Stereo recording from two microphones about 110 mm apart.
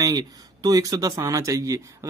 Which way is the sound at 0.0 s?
35° right (ahead or behind).